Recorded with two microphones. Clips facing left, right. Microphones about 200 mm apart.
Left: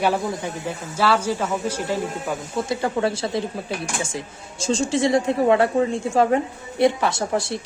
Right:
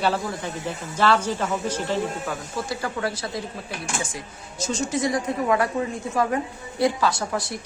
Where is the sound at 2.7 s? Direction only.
25° left (ahead or behind).